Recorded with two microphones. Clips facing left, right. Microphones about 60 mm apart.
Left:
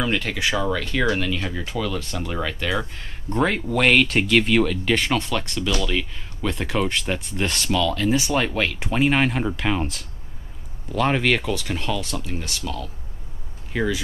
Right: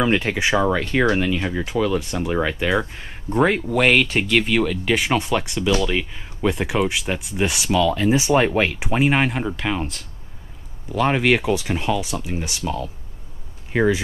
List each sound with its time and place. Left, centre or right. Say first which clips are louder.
0.0 s speech: right 4 dB; right